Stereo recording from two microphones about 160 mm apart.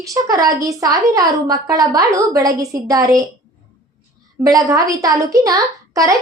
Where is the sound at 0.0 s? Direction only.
20° right (ahead or behind).